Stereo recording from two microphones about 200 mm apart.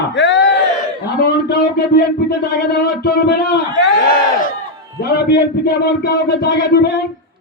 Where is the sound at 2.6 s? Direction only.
55° left (ahead or behind).